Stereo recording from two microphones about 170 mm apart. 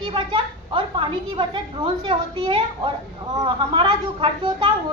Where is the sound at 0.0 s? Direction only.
30° right (ahead or behind).